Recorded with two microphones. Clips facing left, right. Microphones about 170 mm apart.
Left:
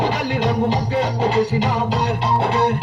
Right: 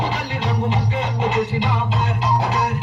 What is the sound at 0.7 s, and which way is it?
Music, 35° left (ahead or behind).